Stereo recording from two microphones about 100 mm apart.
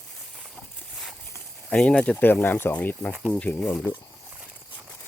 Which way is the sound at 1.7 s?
10° left (ahead or behind).